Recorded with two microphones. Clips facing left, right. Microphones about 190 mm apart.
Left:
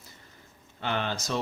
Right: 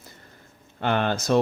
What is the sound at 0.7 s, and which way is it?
Speech, 55° right (ahead or behind).